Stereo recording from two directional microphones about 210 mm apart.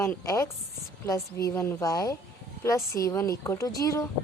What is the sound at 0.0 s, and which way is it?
Speech, 15° left (ahead or behind).